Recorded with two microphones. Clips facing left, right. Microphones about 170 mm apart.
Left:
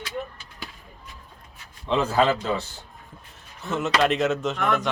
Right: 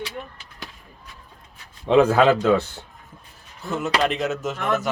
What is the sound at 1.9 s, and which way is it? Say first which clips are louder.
Speech: right 6 dB; 60° right (ahead or behind).